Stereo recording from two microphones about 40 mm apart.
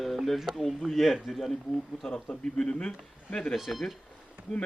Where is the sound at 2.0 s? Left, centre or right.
Left.